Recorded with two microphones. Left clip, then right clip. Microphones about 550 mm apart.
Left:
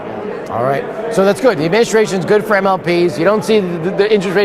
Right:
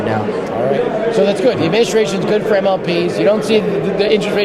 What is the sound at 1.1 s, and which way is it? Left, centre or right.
A man's voice, left.